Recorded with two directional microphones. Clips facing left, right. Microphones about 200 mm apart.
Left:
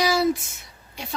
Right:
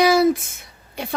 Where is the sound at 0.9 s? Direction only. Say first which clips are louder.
Right 6 dB; 55° right (ahead or behind).